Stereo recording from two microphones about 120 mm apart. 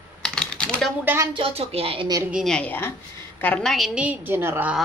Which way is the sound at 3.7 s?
Centre (ahead or behind).